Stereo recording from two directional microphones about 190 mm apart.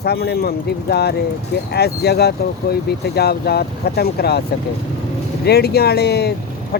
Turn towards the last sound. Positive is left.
turn(degrees=55)  # may be behind; listen again after turning